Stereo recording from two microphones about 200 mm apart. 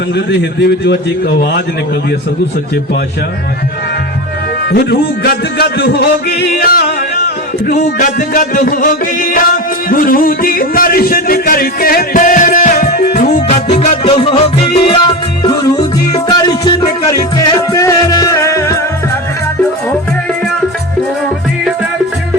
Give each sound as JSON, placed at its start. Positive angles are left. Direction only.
{"t": 0.3, "sound": "a man's voice", "side_deg": 55}
{"t": 4.7, "sound": "music", "side_deg": 55}
{"t": 13.2, "sound": "music", "side_deg": 35}